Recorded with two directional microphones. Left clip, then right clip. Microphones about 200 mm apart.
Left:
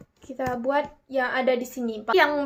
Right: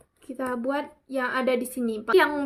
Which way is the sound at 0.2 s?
35° right (ahead or behind).